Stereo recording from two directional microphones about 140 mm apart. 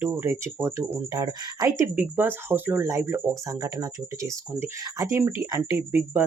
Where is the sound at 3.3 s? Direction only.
25° right (ahead or behind).